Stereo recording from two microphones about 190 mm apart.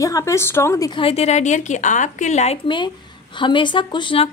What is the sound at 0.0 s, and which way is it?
A woman's voice, 15° left (ahead or behind).